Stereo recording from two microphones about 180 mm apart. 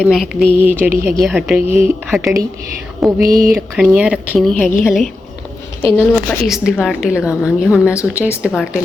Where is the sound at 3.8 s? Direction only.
5° right (ahead or behind).